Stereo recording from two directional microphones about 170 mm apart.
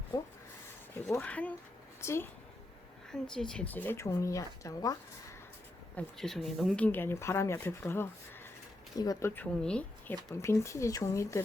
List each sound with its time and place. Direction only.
0.1 s speech: 20° left (ahead or behind)
1.1 s speech: 10° left (ahead or behind)
3.1 s speech: 5° left (ahead or behind); by 4.9 s 20° left (ahead or behind)
6.0 s speech: centre (ahead or behind)